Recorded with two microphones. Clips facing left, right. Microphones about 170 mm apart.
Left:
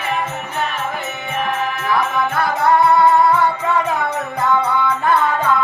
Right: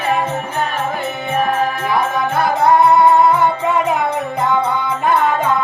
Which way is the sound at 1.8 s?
20° right (ahead or behind).